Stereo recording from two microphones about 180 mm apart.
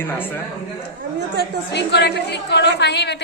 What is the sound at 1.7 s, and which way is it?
A woman's voice, 70° left (ahead or behind).